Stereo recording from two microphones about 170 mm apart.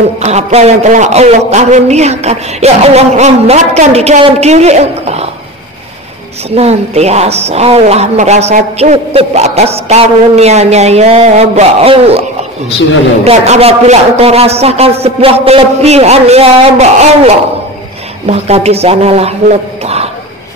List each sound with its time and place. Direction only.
0.2 s a woman's voice: 40° right (ahead or behind)
6.5 s a woman's voice: 40° right (ahead or behind)
18.2 s a woman's voice: 40° right (ahead or behind)
19.8 s a sound: 40° right (ahead or behind)